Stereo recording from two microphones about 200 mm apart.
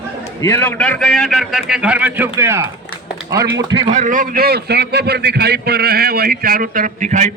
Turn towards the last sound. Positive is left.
turn(degrees=-40)  # may be behind; listen again after turning